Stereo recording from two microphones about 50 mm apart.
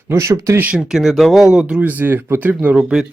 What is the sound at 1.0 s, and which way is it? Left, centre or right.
Speech, centre.